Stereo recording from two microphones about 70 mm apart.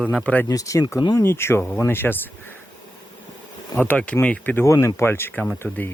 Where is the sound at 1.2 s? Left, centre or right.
Left.